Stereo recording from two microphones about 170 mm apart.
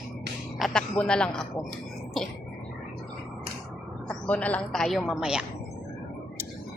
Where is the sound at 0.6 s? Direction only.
Centre (ahead or behind).